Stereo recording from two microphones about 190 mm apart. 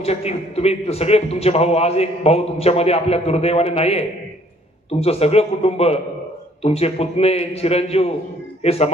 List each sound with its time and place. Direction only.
0.0 s a man's voice: 35° left (ahead or behind)